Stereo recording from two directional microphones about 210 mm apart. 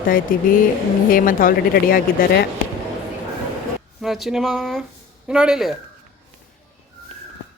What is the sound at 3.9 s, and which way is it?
Speech, centre (ahead or behind).